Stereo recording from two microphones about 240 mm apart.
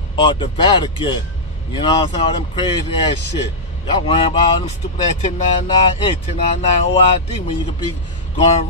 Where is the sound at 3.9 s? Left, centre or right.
Left.